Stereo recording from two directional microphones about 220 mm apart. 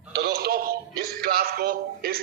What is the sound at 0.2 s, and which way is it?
Synthetic singing, 45° right (ahead or behind).